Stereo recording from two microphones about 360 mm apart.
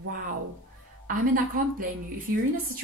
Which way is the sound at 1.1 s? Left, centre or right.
Right.